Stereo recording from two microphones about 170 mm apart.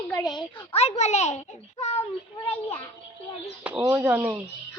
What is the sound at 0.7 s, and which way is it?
A child's voice, 40° left (ahead or behind).